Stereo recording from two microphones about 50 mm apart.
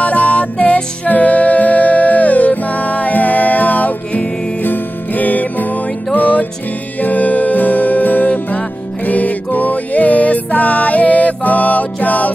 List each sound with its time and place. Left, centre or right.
0.0 s music: left